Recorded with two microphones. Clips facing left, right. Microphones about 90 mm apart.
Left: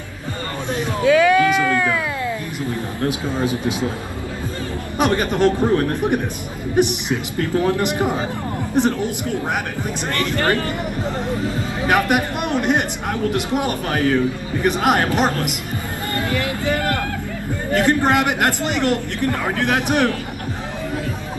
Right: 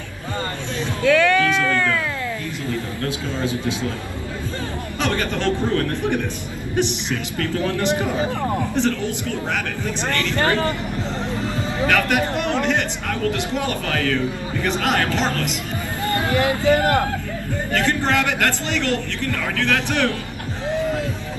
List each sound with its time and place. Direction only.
1.0 s a sound: 5° left (ahead or behind)
2.7 s a man's voice: 20° left (ahead or behind)
4.9 s a man's voice: 20° left (ahead or behind)
10.3 s speech: 25° right (ahead or behind)
11.9 s a man's voice: 20° left (ahead or behind)
16.2 s speech: 25° right (ahead or behind)
17.7 s a man's voice: 20° left (ahead or behind)